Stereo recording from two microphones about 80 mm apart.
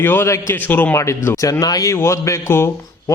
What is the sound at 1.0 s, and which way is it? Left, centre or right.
A man's voice, left.